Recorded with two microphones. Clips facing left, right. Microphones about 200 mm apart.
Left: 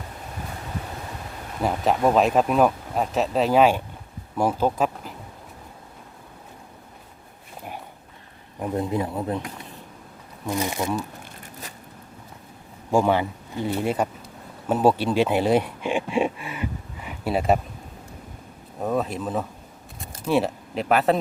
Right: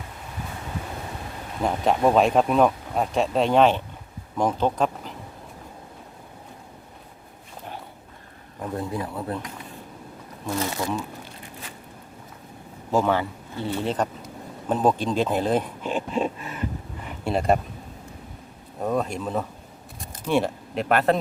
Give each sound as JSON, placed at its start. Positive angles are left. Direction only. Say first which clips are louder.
{"t": 1.6, "sound": "speech", "louder": "even", "side_deg": 0}
{"t": 8.6, "sound": "speech", "louder": "left 4 dB", "side_deg": 20}
{"t": 10.4, "sound": "speech", "louder": "left 1 dB", "side_deg": 15}
{"t": 12.9, "sound": "speech", "louder": "left 2 dB", "side_deg": 15}
{"t": 18.8, "sound": "speech", "louder": "even", "side_deg": 0}